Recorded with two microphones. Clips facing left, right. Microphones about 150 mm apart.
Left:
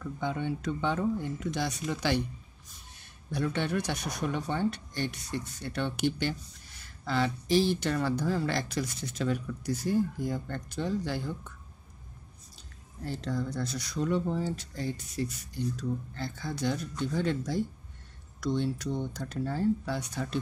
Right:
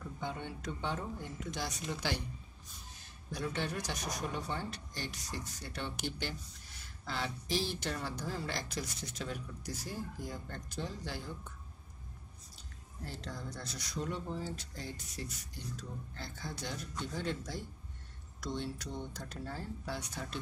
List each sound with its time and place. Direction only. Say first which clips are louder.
0.2 s speech: left 9 dB; 70° left (ahead or behind)
3.3 s speech: left 7 dB; 65° left (ahead or behind)
13.0 s speech: left 11 dB; 70° left (ahead or behind)